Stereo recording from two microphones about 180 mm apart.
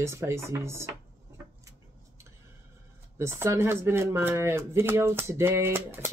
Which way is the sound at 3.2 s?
15° right (ahead or behind).